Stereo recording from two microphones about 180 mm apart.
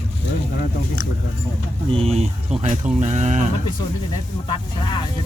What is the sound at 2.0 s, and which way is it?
Speech, 35° right (ahead or behind).